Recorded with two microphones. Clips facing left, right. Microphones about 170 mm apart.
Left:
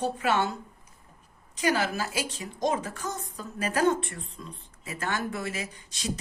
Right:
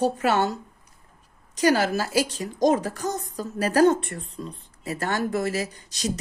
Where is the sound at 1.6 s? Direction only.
40° right (ahead or behind).